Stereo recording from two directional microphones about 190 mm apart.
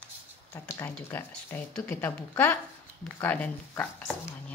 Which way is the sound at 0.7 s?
15° left (ahead or behind).